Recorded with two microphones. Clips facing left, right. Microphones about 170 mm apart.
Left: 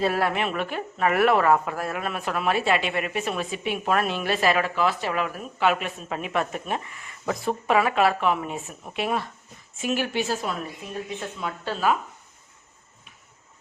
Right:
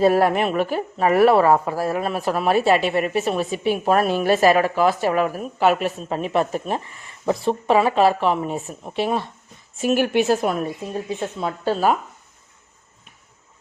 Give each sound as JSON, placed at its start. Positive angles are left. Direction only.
{"t": 0.0, "sound": "a woman's voice", "side_deg": -40}
{"t": 9.8, "sound": "a woman's voice", "side_deg": -45}
{"t": 10.9, "sound": "a woman's voice", "side_deg": -35}